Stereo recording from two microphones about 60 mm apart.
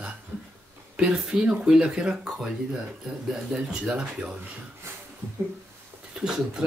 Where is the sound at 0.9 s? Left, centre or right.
Centre.